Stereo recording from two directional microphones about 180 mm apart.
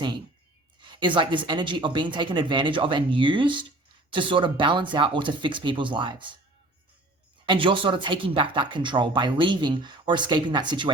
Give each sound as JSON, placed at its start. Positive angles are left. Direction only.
{"t": 0.8, "sound": "speech", "side_deg": -25}
{"t": 7.4, "sound": "speech", "side_deg": -25}